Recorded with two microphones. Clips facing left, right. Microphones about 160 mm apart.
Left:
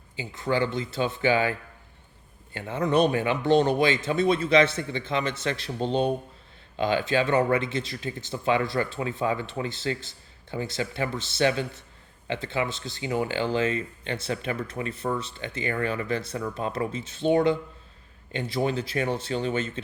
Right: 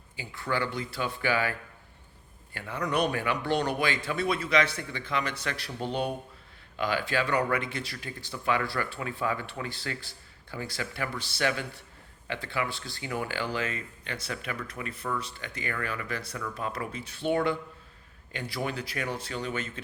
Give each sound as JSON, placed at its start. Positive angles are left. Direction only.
{"t": 0.2, "sound": "speech", "side_deg": 20}